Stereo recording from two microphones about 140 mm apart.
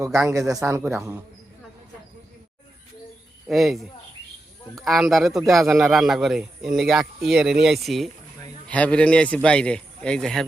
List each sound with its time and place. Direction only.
0.3 s a man's voice: 25° right (ahead or behind)
3.4 s a man's voice: centre (ahead or behind)